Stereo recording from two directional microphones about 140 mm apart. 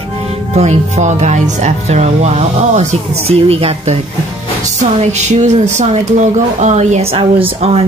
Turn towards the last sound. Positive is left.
turn(degrees=-45)  # may be behind; listen again after turning